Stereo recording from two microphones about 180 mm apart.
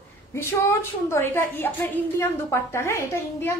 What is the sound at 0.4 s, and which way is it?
A woman's voice, 15° left (ahead or behind).